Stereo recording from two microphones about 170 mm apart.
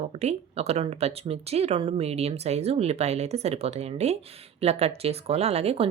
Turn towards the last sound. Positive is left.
turn(degrees=-35)  # may be behind; listen again after turning